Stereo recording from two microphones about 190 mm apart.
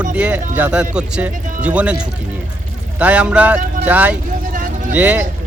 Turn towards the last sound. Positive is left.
turn(degrees=-10)  # may be behind; listen again after turning